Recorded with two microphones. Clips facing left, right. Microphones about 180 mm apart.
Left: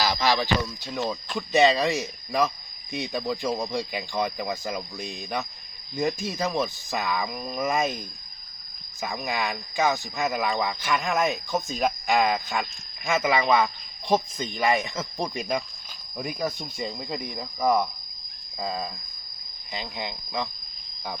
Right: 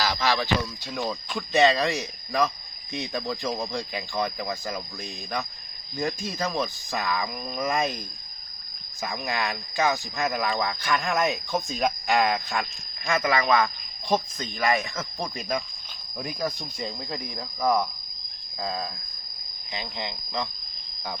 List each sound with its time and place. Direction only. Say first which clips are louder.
0.0 s music: left 2 dB; 10° left (ahead or behind)
0.9 s speech: left 1 dB; centre (ahead or behind)
6.6 s speech: left 1 dB; 5° left (ahead or behind)
9.0 s speech: even; centre (ahead or behind)
16.1 s speech: left 1 dB; centre (ahead or behind)